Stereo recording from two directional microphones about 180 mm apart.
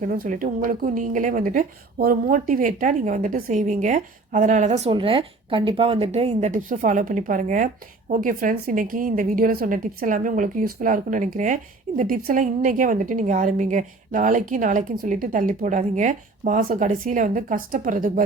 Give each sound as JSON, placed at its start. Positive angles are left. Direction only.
{"t": 0.0, "sound": "a woman's voice", "side_deg": -50}